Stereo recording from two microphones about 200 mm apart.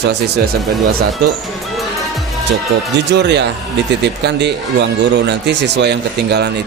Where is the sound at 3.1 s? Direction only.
60° right (ahead or behind).